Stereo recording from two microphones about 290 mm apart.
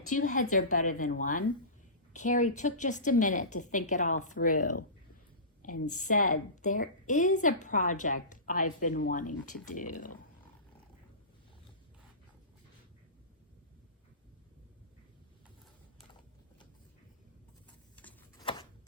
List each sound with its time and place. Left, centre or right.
0.0 s a woman's voice: left
5.9 s a woman's voice: left
17.9 s tick-tock: centre